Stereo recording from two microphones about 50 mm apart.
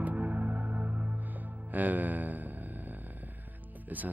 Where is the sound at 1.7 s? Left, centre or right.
Right.